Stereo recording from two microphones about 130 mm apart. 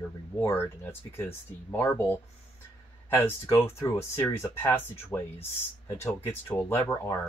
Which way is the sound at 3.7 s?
20° left (ahead or behind).